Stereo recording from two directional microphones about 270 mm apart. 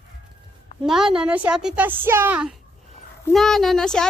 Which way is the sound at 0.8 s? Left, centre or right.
Centre.